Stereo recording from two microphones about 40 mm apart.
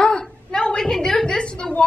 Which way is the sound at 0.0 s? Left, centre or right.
Left.